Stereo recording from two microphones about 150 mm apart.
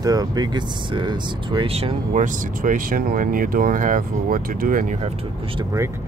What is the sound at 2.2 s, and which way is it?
Speech, 65° right (ahead or behind).